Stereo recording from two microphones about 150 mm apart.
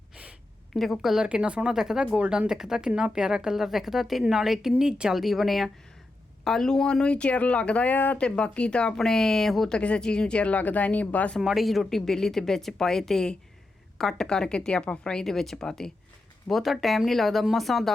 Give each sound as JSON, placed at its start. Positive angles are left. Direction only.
{"t": 0.7, "sound": "speech", "side_deg": 0}